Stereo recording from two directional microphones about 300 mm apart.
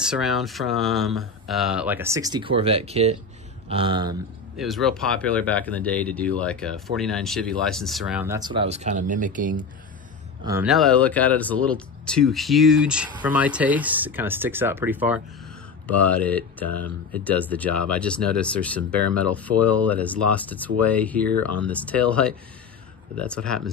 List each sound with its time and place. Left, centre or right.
0.0 s speech: centre
4.6 s speech: centre; by 9.6 s right
10.4 s speech: centre